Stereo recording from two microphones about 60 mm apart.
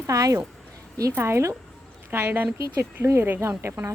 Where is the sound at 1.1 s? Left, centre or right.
Right.